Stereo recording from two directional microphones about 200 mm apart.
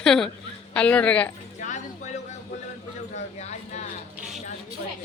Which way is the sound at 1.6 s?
35° left (ahead or behind).